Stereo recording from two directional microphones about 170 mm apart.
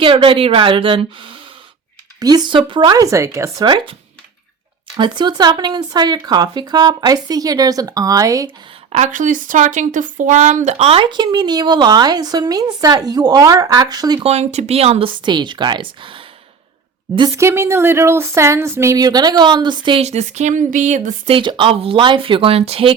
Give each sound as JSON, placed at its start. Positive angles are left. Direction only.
{"t": 0.0, "sound": "a woman's voice", "side_deg": -30}
{"t": 4.9, "sound": "speech", "side_deg": -25}
{"t": 8.9, "sound": "speech", "side_deg": -45}
{"t": 14.3, "sound": "a woman's voice", "side_deg": -40}
{"t": 17.2, "sound": "speech", "side_deg": -20}
{"t": 21.2, "sound": "a woman's voice", "side_deg": -30}